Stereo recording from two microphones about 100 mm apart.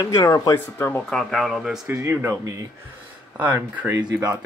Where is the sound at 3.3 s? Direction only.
15° right (ahead or behind).